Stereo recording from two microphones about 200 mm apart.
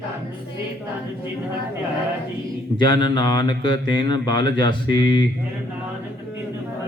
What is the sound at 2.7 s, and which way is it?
Mantra, 20° left (ahead or behind).